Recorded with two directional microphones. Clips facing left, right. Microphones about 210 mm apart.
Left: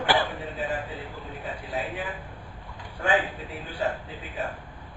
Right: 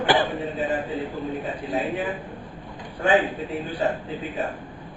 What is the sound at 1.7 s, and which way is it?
Speech, 20° right (ahead or behind).